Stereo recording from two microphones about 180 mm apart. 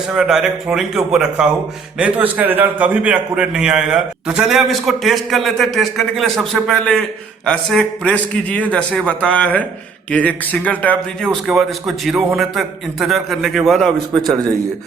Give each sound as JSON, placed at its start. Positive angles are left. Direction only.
{"t": 0.1, "sound": "a man's voice", "side_deg": -5}
{"t": 14.2, "sound": "a man's voice", "side_deg": -20}